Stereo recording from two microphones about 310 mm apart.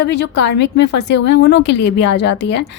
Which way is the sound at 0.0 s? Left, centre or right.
Left.